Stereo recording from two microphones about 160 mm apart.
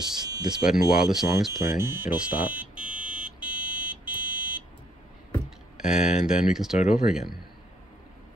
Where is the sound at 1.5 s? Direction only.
20° right (ahead or behind).